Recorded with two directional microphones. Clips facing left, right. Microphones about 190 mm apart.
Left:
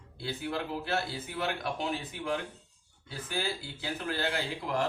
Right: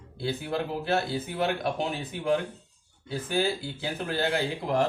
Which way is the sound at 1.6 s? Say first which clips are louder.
Right 4 dB; 50° right (ahead or behind).